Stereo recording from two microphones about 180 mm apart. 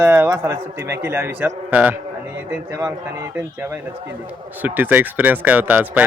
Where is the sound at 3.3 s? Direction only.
10° right (ahead or behind).